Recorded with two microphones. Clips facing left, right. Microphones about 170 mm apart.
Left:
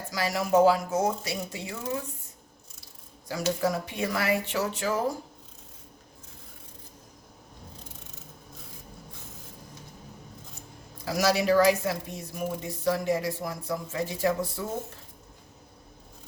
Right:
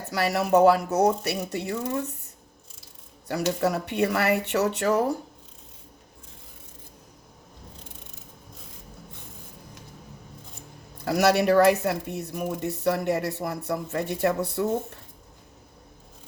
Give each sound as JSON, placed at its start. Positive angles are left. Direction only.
{"t": 0.1, "sound": "speech", "side_deg": -65}
{"t": 3.2, "sound": "speech", "side_deg": -65}
{"t": 10.9, "sound": "speech", "side_deg": -60}